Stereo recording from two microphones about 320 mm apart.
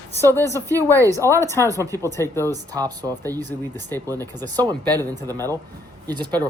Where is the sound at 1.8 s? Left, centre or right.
Centre.